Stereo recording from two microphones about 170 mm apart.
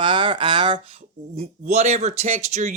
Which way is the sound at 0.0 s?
30° right (ahead or behind).